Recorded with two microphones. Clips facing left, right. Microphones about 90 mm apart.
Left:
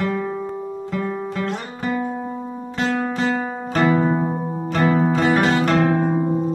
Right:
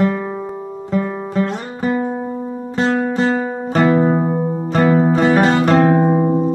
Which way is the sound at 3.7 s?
25° right (ahead or behind).